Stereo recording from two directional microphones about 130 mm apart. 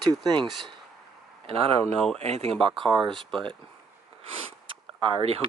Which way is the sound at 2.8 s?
35° right (ahead or behind).